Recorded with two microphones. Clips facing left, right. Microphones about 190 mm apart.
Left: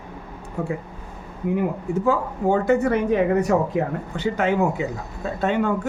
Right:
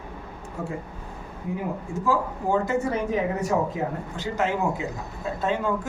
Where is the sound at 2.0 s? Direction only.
65° left (ahead or behind).